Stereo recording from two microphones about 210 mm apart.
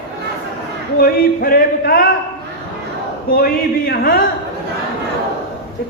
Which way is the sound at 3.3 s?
45° left (ahead or behind).